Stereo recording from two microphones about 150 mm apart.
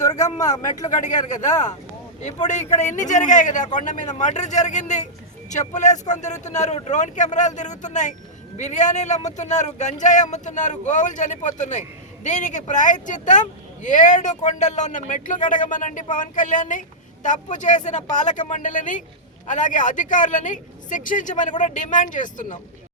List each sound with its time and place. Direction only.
0.0 s speech: 25° left (ahead or behind)
1.0 s speech: 55° left (ahead or behind)